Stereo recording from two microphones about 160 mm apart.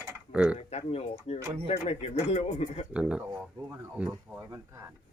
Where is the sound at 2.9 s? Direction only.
5° right (ahead or behind).